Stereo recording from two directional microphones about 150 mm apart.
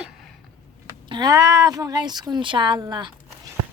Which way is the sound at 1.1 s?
25° right (ahead or behind).